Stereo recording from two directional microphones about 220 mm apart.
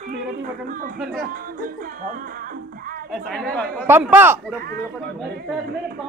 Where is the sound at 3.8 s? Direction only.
10° right (ahead or behind).